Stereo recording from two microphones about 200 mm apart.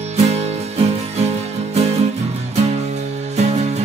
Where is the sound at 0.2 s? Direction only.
30° right (ahead or behind).